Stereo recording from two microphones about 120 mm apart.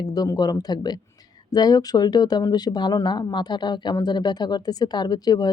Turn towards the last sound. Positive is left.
turn(degrees=35)  # may be behind; listen again after turning